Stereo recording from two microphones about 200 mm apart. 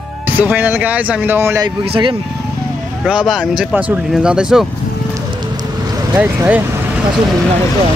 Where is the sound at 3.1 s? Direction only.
5° right (ahead or behind).